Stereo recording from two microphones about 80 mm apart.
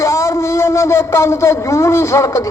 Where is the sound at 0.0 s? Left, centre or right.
Left.